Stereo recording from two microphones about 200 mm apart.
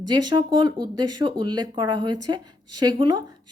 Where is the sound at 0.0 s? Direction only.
20° right (ahead or behind).